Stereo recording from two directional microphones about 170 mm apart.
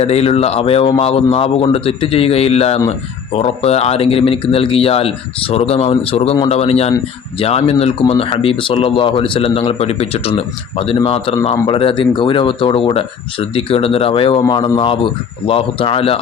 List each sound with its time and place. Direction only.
0.0 s speech: 35° left (ahead or behind)